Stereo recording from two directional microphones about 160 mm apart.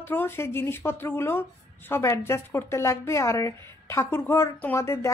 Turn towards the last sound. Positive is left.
turn(degrees=15)  # may be behind; listen again after turning